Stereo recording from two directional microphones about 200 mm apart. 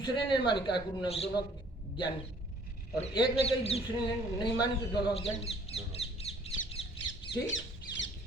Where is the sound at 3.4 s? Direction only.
30° left (ahead or behind).